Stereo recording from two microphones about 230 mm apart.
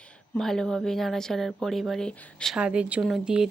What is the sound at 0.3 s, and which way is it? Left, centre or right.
Speech, centre.